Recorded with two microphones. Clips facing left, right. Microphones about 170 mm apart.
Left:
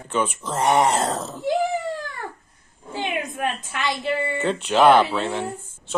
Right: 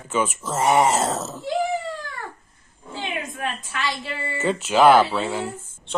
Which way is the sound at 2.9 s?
20° left (ahead or behind).